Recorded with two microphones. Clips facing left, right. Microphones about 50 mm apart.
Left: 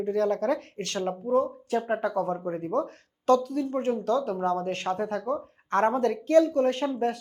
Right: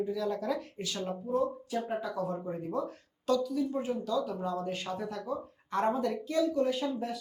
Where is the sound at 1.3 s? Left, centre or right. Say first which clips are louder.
Left 6 dB; left.